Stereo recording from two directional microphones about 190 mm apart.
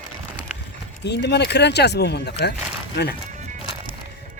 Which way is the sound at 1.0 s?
65° left (ahead or behind).